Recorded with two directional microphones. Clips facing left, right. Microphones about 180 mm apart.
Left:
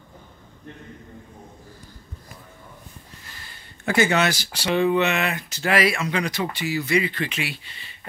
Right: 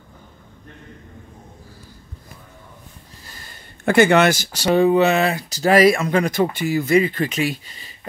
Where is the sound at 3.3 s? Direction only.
40° right (ahead or behind).